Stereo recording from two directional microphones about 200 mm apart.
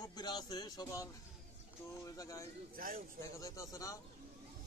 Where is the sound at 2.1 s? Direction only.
15° left (ahead or behind).